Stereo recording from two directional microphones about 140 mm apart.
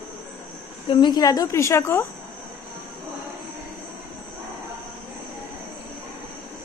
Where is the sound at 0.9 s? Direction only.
30° left (ahead or behind).